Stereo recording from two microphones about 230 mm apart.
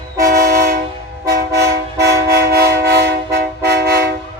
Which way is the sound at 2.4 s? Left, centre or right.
Right.